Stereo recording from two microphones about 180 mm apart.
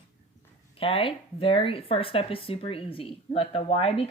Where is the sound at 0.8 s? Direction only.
30° left (ahead or behind).